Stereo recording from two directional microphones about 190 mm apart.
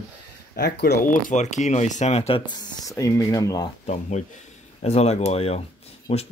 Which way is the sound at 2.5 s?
20° left (ahead or behind).